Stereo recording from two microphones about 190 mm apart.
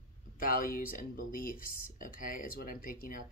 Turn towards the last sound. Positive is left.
turn(degrees=45)  # may be behind; listen again after turning